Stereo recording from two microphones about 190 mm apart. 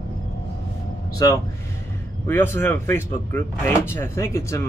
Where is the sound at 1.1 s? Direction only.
20° left (ahead or behind).